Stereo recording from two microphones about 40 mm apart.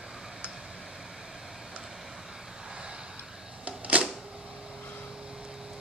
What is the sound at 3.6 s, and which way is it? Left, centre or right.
Camera, right.